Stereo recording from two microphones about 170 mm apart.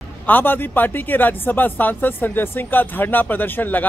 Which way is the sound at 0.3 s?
10° left (ahead or behind).